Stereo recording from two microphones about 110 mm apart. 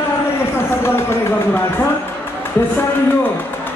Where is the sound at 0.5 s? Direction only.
20° left (ahead or behind).